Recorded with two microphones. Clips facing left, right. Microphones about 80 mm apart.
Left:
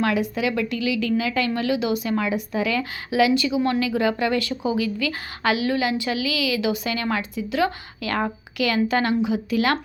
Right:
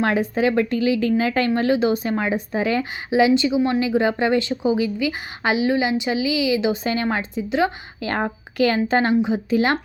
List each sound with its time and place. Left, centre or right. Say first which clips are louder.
0.0 s a woman's voice: right 3 dB; right